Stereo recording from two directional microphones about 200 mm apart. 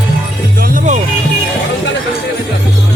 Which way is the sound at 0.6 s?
35° right (ahead or behind).